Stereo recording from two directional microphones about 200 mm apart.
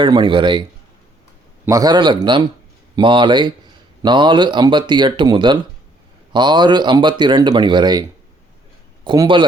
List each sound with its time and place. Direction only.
0.0 s speech: 25° right (ahead or behind)
1.6 s speech: 15° right (ahead or behind)
9.0 s speech: 25° right (ahead or behind)